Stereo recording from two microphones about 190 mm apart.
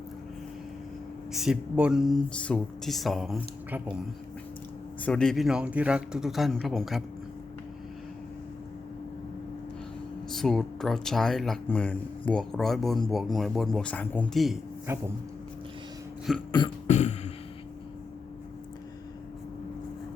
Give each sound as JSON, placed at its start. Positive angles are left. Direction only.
{"t": 1.3, "sound": "speech", "side_deg": -5}
{"t": 5.0, "sound": "speech", "side_deg": 5}
{"t": 10.3, "sound": "speech", "side_deg": 0}
{"t": 14.9, "sound": "a sound", "side_deg": -15}
{"t": 16.5, "sound": "beatboxing", "side_deg": 25}
{"t": 16.8, "sound": "beatboxing", "side_deg": 35}